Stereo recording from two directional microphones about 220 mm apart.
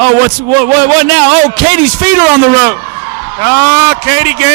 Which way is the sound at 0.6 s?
15° right (ahead or behind).